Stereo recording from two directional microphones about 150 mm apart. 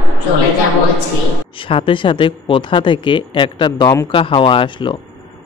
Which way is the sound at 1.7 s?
35° left (ahead or behind).